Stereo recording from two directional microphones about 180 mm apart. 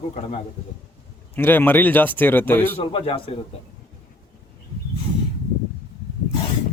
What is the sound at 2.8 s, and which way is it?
Speech, 30° left (ahead or behind).